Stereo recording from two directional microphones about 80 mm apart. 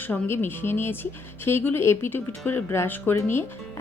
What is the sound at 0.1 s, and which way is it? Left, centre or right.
A woman's voice, left.